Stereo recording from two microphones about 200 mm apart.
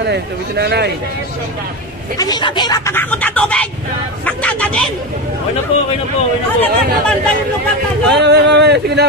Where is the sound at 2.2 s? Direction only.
20° left (ahead or behind); by 4.9 s 5° left (ahead or behind).